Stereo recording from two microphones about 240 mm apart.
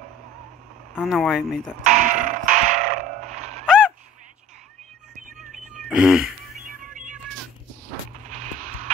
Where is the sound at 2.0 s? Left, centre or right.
Right.